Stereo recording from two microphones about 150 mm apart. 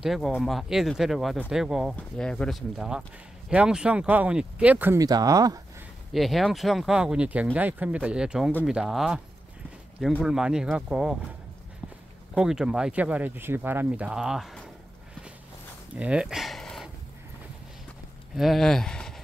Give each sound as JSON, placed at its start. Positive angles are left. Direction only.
{"t": 0.0, "sound": "speech", "side_deg": 0}
{"t": 2.0, "sound": "speech", "side_deg": 5}
{"t": 4.9, "sound": "speech", "side_deg": -25}
{"t": 6.1, "sound": "speech", "side_deg": 0}
{"t": 10.2, "sound": "speech", "side_deg": -5}
{"t": 12.4, "sound": "speech", "side_deg": -5}
{"t": 15.9, "sound": "livestock", "side_deg": -10}
{"t": 18.3, "sound": "speech", "side_deg": 0}